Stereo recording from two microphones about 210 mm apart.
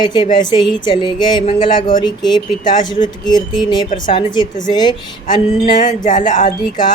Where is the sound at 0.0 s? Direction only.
20° left (ahead or behind).